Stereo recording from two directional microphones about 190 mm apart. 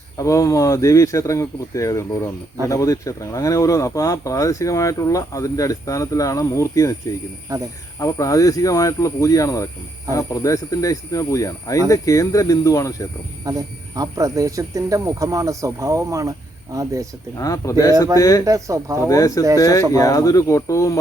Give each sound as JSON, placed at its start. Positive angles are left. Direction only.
{"t": 0.2, "sound": "speech", "side_deg": 15}
{"t": 7.5, "sound": "speech", "side_deg": -15}
{"t": 7.9, "sound": "speech", "side_deg": 20}
{"t": 13.4, "sound": "speech", "side_deg": -20}
{"t": 17.3, "sound": "speech", "side_deg": 15}
{"t": 18.4, "sound": "speech", "side_deg": -15}
{"t": 19.0, "sound": "speech", "side_deg": 15}